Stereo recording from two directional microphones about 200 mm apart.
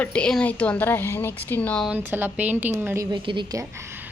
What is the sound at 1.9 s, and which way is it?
A woman's voice, 10° right (ahead or behind).